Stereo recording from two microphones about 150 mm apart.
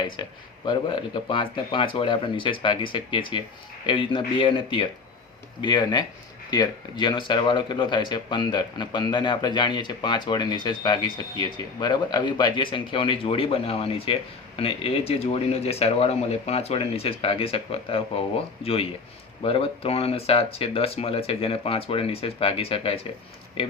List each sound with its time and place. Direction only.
0.0 s speech: 30° left (ahead or behind)